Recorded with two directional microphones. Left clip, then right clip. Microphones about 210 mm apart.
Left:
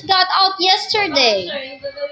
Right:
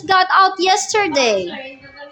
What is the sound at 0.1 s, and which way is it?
A woman's voice, 30° right (ahead or behind).